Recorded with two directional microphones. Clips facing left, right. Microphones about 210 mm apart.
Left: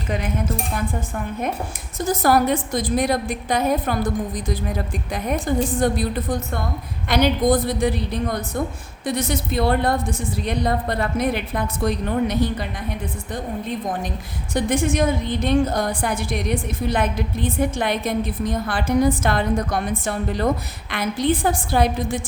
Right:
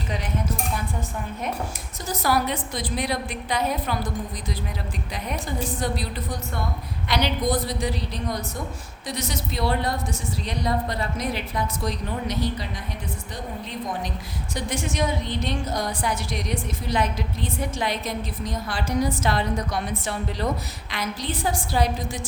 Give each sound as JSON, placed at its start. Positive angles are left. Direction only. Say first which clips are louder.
{"t": 2.0, "sound": "a woman's voice", "louder": "left 6 dB", "side_deg": 50}